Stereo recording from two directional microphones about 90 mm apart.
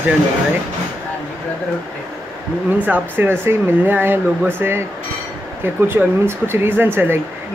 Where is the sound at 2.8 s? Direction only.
20° right (ahead or behind).